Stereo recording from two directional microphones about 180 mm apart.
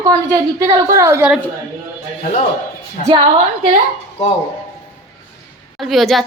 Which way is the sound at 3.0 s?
30° right (ahead or behind).